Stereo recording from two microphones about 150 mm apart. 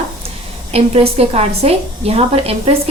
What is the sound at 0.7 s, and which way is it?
A woman's voice, 40° right (ahead or behind).